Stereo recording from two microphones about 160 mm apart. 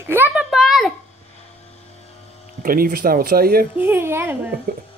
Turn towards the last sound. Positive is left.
turn(degrees=-15)  # may be behind; listen again after turning